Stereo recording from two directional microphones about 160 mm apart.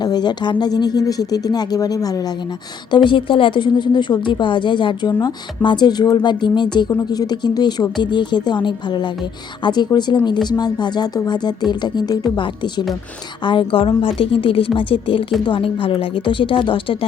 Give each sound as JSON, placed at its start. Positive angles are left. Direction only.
{"t": 0.0, "sound": "speech", "side_deg": 25}